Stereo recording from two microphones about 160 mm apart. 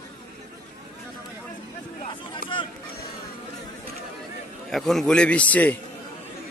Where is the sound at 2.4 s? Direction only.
65° left (ahead or behind).